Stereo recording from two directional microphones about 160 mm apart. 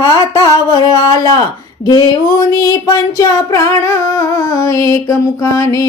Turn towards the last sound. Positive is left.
turn(degrees=20)  # may be behind; listen again after turning